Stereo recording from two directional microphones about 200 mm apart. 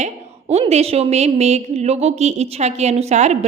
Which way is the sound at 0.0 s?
35° right (ahead or behind).